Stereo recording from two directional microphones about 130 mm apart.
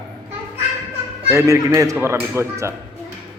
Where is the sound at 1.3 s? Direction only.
20° right (ahead or behind).